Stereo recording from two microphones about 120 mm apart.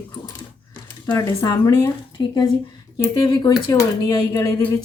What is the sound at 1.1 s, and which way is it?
Speech, 25° left (ahead or behind).